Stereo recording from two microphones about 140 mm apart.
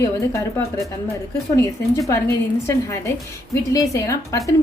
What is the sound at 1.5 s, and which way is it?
Speech, 25° left (ahead or behind).